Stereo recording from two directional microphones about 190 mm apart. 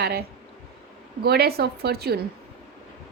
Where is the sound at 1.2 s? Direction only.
55° right (ahead or behind).